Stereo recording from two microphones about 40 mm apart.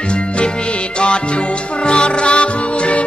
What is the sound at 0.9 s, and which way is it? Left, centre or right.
Music, left.